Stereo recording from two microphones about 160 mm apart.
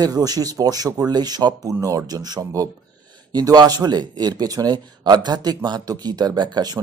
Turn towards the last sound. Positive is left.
turn(degrees=-25)  # may be behind; listen again after turning